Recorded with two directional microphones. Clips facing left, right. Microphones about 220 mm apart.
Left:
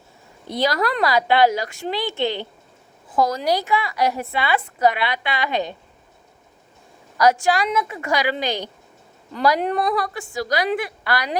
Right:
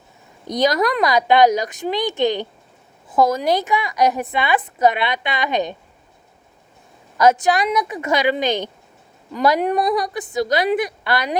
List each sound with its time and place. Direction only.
0.4 s a woman's voice: 20° right (ahead or behind)
7.2 s a woman's voice: 20° right (ahead or behind)